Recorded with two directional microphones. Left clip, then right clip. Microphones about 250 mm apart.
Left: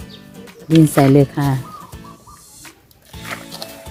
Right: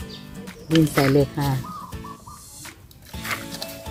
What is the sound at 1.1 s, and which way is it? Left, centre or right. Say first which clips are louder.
Speech: left 6 dB; left.